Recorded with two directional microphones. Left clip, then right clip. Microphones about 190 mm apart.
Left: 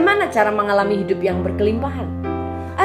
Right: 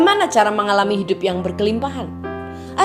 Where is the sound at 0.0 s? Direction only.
35° right (ahead or behind).